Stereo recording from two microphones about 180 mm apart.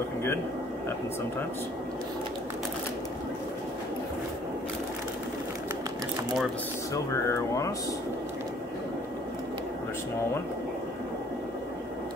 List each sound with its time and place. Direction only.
6.9 s speech: 15° left (ahead or behind)